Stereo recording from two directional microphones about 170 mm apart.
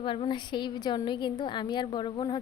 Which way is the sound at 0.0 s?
30° left (ahead or behind).